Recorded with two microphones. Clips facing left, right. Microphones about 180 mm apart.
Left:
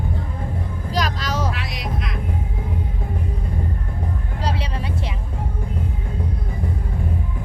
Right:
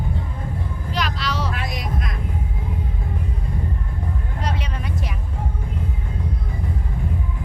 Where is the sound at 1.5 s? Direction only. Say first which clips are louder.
Right 1 dB; 50° right (ahead or behind).